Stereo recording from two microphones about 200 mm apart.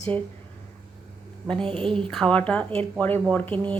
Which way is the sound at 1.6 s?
25° right (ahead or behind).